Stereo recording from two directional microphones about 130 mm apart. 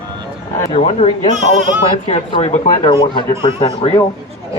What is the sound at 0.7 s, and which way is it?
Speech, 55° left (ahead or behind).